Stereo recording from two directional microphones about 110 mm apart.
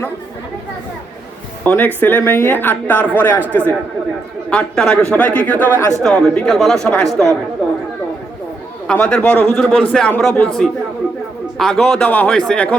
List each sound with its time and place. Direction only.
1.6 s a woman's voice: 15° left (ahead or behind)
6.0 s speech: 5° left (ahead or behind)
8.9 s a woman's voice: 10° left (ahead or behind)